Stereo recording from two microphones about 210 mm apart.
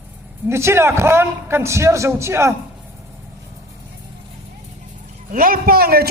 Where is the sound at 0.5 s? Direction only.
10° right (ahead or behind).